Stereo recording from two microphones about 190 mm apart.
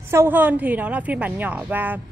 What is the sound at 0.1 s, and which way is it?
A woman's voice, 10° right (ahead or behind).